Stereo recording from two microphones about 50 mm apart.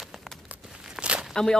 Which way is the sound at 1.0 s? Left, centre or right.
Right.